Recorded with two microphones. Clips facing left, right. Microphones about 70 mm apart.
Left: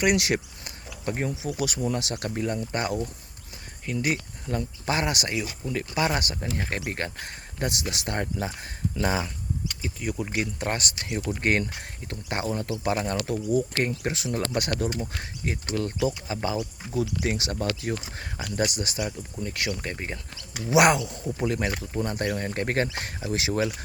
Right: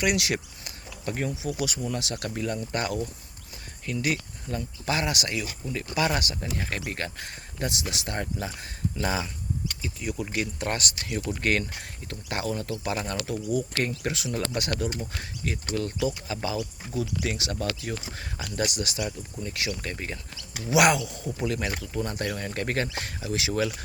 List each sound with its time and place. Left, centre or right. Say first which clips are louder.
0.0 s speech: left 3 dB; left
1.5 s speech: left 3 dB; left
4.5 s speech: left 3 dB; left
4.9 s speech: left 1 dB; left
5.9 s speech: right 1 dB; left
8.4 s speech: left 1 dB; left
13.8 s speech: left 1 dB; left
16.0 s speech: left 2 dB; left
18.3 s speech: left 2 dB; left
19.4 s speech: left 2 dB; left
19.8 s speech: left 1 dB; left